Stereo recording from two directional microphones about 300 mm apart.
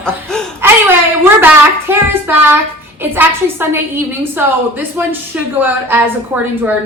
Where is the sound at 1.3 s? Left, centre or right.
Centre.